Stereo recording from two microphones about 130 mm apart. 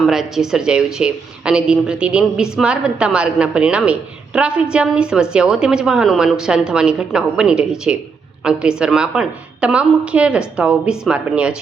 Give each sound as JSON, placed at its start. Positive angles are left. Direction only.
{"t": 0.0, "sound": "speech", "side_deg": -5}